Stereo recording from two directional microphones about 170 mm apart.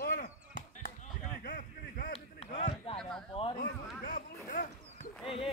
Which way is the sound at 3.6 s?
55° left (ahead or behind).